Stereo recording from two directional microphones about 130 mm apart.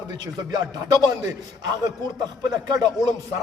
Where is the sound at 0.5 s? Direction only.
30° right (ahead or behind).